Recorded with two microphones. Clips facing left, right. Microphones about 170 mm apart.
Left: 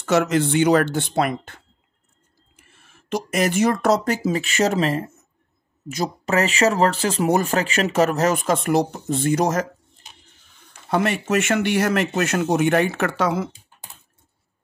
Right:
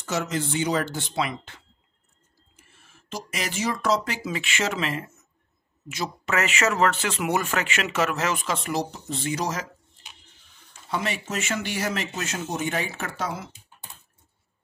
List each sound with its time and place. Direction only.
0.0 s speech: 65° left (ahead or behind)
3.1 s speech: 55° left (ahead or behind); by 5.1 s 35° left (ahead or behind)
6.2 s speech: 35° left (ahead or behind); by 13.5 s 85° left